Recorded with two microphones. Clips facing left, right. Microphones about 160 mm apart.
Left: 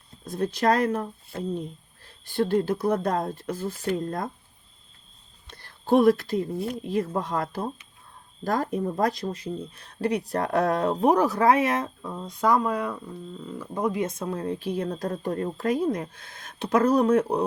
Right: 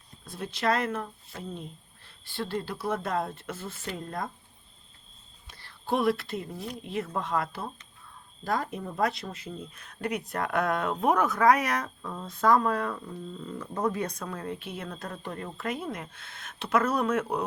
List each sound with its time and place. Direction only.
0.3 s speech: 45° left (ahead or behind)
2.3 s speech: 45° left (ahead or behind)
5.5 s speech: 50° left (ahead or behind); by 12.1 s 25° left (ahead or behind)
12.1 s speech: 15° left (ahead or behind); by 17.4 s 35° left (ahead or behind)